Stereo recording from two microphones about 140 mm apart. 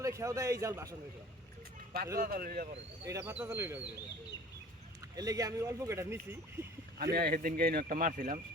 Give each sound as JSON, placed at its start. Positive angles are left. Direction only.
{"t": 0.0, "sound": "speech", "side_deg": -20}
{"t": 2.1, "sound": "speech", "side_deg": -90}
{"t": 3.1, "sound": "speech", "side_deg": -20}
{"t": 5.1, "sound": "speech", "side_deg": -25}
{"t": 7.0, "sound": "speech", "side_deg": -90}